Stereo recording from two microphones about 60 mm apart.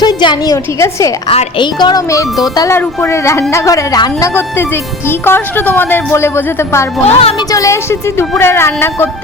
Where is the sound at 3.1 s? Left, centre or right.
Left.